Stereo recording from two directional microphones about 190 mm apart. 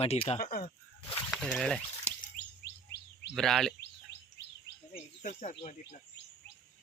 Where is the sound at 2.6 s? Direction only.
60° left (ahead or behind).